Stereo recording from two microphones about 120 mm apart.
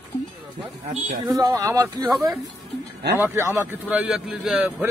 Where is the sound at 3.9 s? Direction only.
5° right (ahead or behind).